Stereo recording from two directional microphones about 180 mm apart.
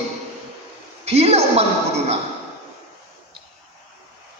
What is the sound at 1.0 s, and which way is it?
Speech, 35° right (ahead or behind).